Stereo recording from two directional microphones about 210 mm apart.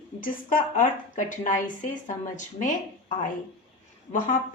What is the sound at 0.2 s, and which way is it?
A woman's voice, 40° left (ahead or behind).